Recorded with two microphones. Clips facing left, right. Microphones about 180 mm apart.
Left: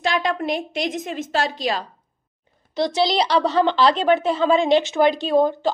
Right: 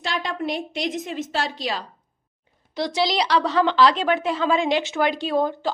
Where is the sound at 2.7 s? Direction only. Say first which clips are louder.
Left 3 dB; 25° left (ahead or behind).